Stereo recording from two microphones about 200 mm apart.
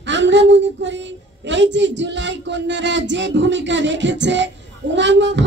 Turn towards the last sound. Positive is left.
turn(degrees=-65)  # may be behind; listen again after turning